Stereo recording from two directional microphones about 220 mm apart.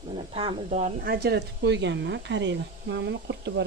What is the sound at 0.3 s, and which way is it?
Speech, 30° right (ahead or behind).